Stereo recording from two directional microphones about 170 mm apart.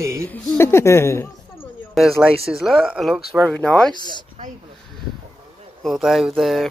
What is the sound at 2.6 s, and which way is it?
Speech, centre (ahead or behind).